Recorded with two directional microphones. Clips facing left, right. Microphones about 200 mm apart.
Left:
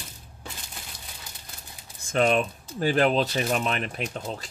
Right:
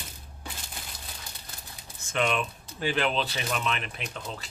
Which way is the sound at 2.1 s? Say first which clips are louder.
Left 5 dB; 40° left (ahead or behind).